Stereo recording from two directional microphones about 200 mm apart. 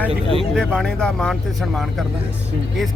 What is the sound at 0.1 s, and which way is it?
Speech, 25° right (ahead or behind).